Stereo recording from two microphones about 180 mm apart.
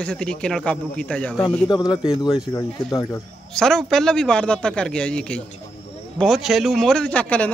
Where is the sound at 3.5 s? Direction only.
5° left (ahead or behind).